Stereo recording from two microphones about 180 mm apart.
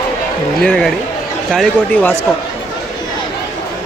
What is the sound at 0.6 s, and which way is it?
Speech, 5° left (ahead or behind).